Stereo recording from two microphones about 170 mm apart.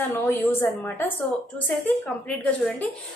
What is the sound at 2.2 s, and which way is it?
Speech, 10° left (ahead or behind).